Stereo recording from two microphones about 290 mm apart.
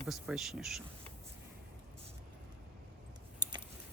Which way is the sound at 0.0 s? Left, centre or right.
Centre.